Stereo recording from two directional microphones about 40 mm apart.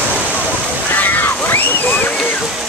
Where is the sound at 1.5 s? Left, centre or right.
Left.